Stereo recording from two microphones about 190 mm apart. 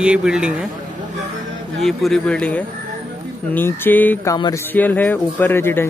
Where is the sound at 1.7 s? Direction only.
Centre (ahead or behind).